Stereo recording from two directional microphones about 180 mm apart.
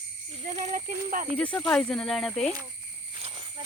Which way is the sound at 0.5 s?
40° right (ahead or behind).